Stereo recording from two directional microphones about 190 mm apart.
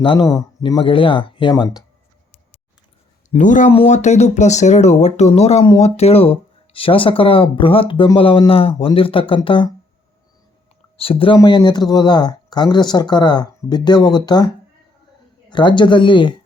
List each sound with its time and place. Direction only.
0.0 s speech: 25° left (ahead or behind)
3.2 s speech: 40° left (ahead or behind)
10.9 s speech: 30° left (ahead or behind)
15.4 s speech: 25° left (ahead or behind)